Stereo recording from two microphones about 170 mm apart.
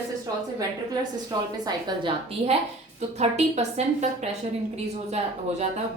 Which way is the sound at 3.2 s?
40° right (ahead or behind).